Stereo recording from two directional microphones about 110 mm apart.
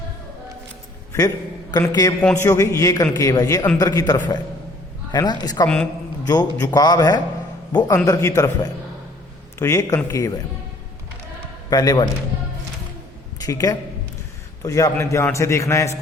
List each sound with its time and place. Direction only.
1.9 s a man's voice: 35° left (ahead or behind)
5.6 s a man's voice: 10° left (ahead or behind)
6.2 s a man's voice: 35° left (ahead or behind)
11.7 s a man's voice: 35° left (ahead or behind)
13.4 s a man's voice: 35° left (ahead or behind)